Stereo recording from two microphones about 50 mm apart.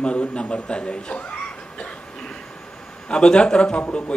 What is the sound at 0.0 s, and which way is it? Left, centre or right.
Speech, left.